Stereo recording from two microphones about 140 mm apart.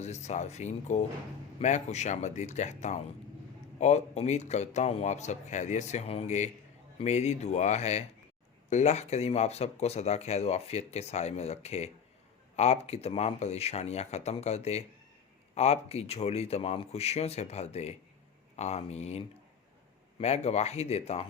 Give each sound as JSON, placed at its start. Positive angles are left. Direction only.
{"t": 0.0, "sound": "speech", "side_deg": 55}